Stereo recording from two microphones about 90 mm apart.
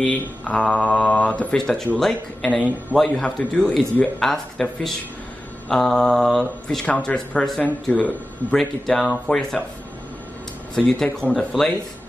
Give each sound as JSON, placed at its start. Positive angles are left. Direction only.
{"t": 0.0, "sound": "speech", "side_deg": 10}
{"t": 7.9, "sound": "speech", "side_deg": 15}
{"t": 8.5, "sound": "speech", "side_deg": 0}
{"t": 10.8, "sound": "speech", "side_deg": 5}